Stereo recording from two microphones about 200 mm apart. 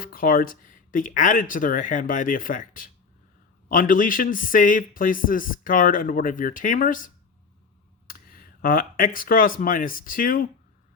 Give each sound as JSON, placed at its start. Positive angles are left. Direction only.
{"t": 0.0, "sound": "a man's voice", "side_deg": 45}